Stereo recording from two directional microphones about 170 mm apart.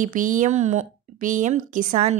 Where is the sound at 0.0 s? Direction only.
50° right (ahead or behind).